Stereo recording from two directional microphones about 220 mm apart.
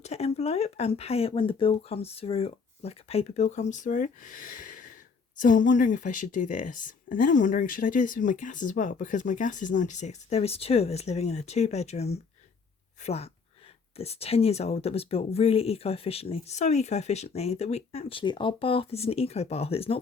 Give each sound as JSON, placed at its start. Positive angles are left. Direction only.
{"t": 0.0, "sound": "speech", "side_deg": 30}